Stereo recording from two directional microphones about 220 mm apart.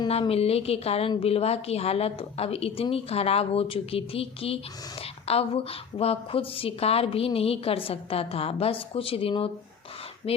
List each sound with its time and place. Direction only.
0.0 s a woman's voice: 25° left (ahead or behind)